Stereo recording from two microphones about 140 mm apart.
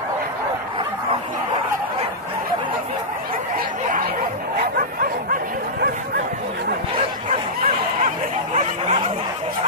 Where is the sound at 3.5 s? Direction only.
90° right.